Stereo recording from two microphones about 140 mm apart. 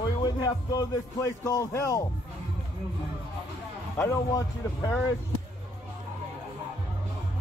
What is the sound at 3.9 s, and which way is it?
Speech, 25° left (ahead or behind).